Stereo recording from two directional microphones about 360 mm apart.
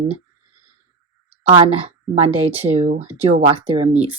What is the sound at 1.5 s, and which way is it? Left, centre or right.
Speech, centre.